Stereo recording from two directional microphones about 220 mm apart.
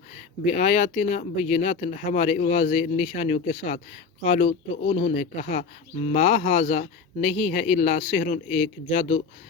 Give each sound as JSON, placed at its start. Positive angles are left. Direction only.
{"t": 0.5, "sound": "speech", "side_deg": 30}